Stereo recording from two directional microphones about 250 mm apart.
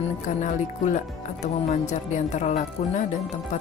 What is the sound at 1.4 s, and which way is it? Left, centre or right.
Speech, left.